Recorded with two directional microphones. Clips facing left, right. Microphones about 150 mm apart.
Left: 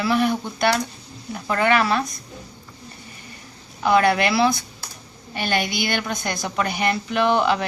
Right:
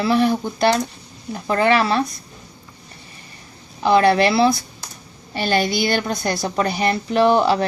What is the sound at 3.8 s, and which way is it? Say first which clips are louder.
A woman's voice: right 3 dB; 30° right (ahead or behind).